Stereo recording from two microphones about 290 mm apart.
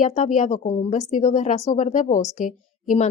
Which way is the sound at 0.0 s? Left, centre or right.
Left.